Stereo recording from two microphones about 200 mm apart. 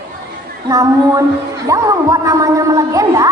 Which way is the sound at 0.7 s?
15° right (ahead or behind).